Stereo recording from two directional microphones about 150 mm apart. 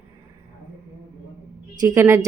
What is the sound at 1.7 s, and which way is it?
Speech, 20° right (ahead or behind).